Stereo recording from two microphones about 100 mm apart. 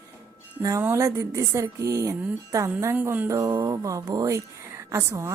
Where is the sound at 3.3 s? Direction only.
30° right (ahead or behind).